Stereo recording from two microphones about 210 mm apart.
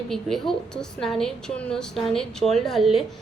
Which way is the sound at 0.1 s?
Centre (ahead or behind).